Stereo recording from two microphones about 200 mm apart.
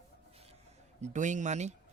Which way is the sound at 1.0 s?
35° right (ahead or behind).